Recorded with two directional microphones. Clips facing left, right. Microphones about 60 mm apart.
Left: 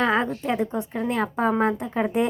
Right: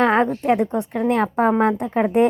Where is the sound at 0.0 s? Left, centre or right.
Right.